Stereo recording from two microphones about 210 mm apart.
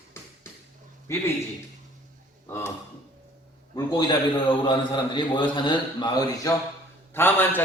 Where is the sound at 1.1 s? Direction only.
15° left (ahead or behind).